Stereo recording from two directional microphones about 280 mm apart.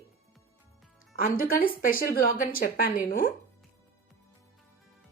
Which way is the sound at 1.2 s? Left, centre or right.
Left.